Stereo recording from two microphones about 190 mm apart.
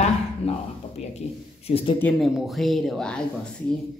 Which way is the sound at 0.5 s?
30° left (ahead or behind).